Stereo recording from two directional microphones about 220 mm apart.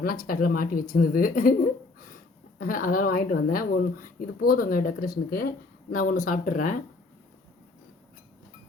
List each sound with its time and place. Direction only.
0.0 s speech: 40° left (ahead or behind)
2.6 s speech: 40° left (ahead or behind)